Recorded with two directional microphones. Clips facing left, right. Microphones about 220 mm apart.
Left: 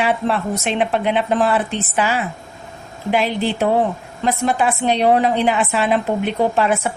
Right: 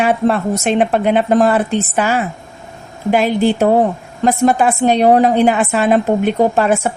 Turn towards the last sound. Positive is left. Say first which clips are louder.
# right 4 dB
turn(degrees=-45)  # may be behind; listen again after turning